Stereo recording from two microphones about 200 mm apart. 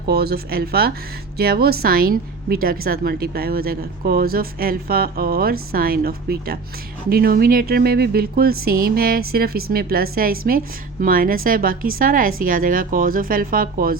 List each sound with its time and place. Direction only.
0.0 s a woman's voice: 50° right (ahead or behind)